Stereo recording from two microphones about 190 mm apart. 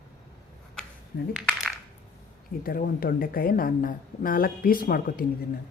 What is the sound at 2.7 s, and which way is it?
Speech, 50° left (ahead or behind).